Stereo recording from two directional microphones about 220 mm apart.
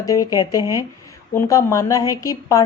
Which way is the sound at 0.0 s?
15° left (ahead or behind).